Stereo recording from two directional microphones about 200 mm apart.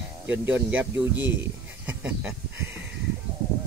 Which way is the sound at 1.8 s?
5° right (ahead or behind).